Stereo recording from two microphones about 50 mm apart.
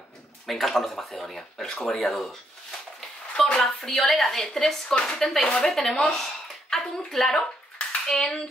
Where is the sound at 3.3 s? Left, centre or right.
Centre.